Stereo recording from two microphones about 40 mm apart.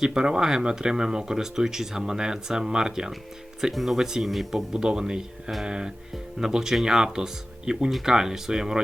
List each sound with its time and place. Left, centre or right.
0.0 s speech: centre
3.6 s speech: centre
4.7 s speech: centre